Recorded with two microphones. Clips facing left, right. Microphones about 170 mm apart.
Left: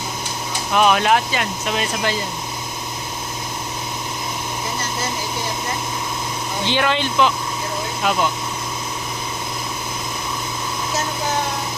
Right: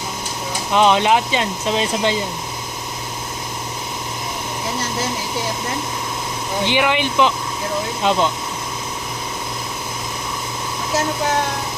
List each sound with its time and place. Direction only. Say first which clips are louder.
0.7 s speech: right 1 dB; 20° right (ahead or behind)
6.7 s speech: right 1 dB; 15° right (ahead or behind)